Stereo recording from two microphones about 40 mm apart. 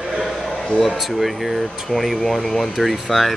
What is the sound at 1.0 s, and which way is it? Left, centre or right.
Speech, centre.